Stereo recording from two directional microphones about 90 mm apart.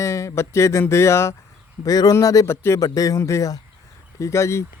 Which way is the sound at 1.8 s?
45° left (ahead or behind).